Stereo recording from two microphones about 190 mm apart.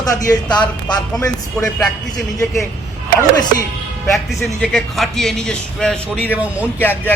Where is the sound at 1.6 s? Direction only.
5° left (ahead or behind).